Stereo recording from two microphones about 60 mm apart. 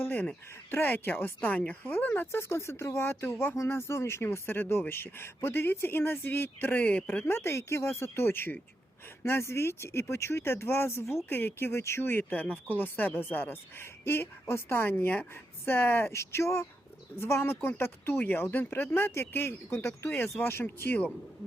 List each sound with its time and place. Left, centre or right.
0.0 s speech: left
2.2 s speech: left
7.3 s speech: left
9.2 s speech: left
12.3 s speech: left
16.1 s speech: left